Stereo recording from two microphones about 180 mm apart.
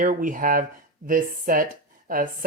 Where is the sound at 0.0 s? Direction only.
50° right (ahead or behind).